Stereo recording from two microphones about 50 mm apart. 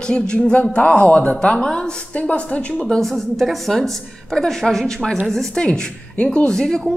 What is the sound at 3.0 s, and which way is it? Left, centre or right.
A woman's voice, centre.